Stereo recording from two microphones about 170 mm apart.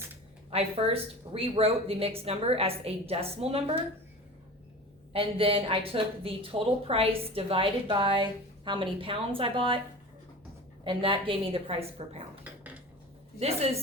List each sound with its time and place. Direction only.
0.5 s a woman's voice: 35° right (ahead or behind)
5.1 s a woman's voice: 30° right (ahead or behind)
10.8 s a woman's voice: 30° right (ahead or behind)
13.4 s a woman's voice: 35° right (ahead or behind)